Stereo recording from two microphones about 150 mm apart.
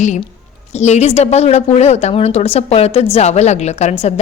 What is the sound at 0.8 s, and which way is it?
A woman's voice, 50° left (ahead or behind).